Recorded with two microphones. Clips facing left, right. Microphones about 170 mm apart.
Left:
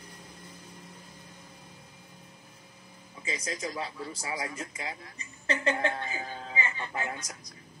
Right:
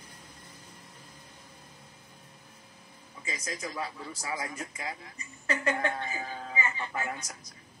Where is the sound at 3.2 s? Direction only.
30° left (ahead or behind).